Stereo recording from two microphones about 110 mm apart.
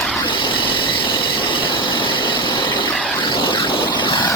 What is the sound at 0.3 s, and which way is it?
Train, 50° left (ahead or behind).